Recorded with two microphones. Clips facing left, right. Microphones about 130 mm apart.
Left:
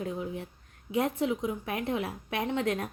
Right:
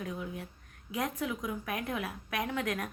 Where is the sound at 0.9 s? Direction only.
30° left (ahead or behind).